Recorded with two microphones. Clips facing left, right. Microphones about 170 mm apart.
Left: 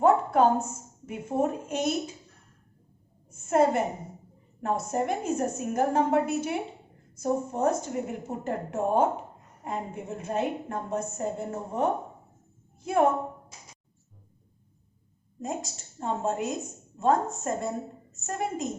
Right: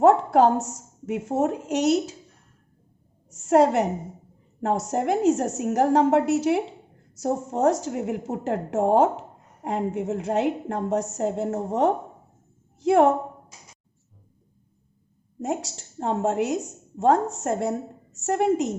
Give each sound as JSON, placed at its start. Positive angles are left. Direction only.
{"t": 0.0, "sound": "a woman's voice", "side_deg": -80}
{"t": 3.2, "sound": "a woman's voice", "side_deg": -75}
{"t": 15.4, "sound": "a woman's voice", "side_deg": -75}